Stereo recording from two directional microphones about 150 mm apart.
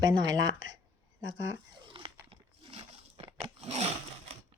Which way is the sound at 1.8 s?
35° right (ahead or behind).